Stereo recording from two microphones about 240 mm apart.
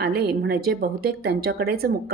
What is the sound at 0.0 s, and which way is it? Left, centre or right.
Speech, right.